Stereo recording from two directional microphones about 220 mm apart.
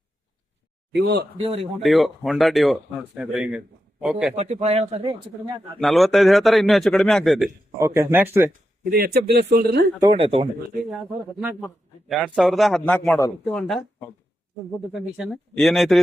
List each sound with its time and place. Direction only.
0.9 s speech: 45° right (ahead or behind)
1.4 s speech: 25° right (ahead or behind)
1.8 s speech: centre (ahead or behind)
4.4 s speech: 30° right (ahead or behind)
5.8 s speech: centre (ahead or behind)
7.8 s speech: 10° right (ahead or behind)
8.8 s speech: 40° right (ahead or behind)
10.0 s speech: 25° right (ahead or behind)
10.8 s speech: centre (ahead or behind); by 13.3 s 15° left (ahead or behind)
13.4 s speech: centre (ahead or behind)